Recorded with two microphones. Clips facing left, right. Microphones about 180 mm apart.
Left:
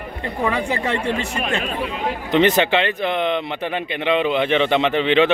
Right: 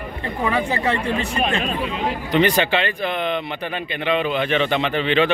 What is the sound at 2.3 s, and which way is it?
Speech, 20° left (ahead or behind).